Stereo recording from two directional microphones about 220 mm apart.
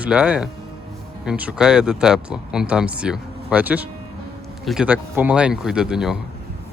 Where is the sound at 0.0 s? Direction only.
5° right (ahead or behind).